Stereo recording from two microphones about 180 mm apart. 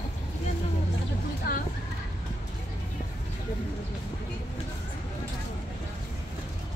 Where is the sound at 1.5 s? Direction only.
55° left (ahead or behind).